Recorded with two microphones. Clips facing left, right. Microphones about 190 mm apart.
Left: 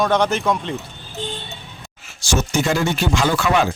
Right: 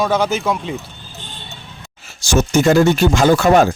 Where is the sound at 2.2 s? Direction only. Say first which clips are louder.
Right 5 dB; 45° right (ahead or behind).